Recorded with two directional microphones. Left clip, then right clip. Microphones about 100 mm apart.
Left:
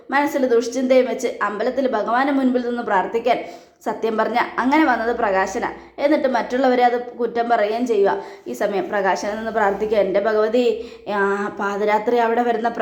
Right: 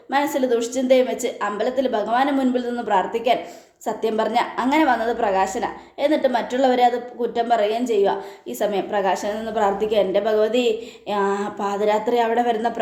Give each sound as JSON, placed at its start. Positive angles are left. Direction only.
{"t": 0.1, "sound": "a woman's voice", "side_deg": -15}